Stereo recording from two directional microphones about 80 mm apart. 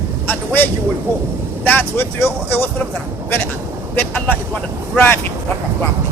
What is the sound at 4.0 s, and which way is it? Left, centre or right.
Speech, left.